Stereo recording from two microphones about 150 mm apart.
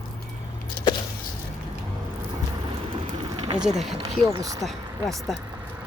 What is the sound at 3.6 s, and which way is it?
Speech, centre (ahead or behind).